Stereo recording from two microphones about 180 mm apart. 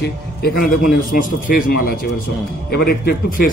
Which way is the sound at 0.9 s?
50° left (ahead or behind).